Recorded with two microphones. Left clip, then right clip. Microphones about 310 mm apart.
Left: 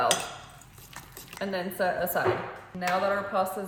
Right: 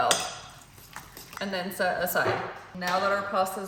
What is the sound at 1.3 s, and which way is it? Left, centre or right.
Speech, centre.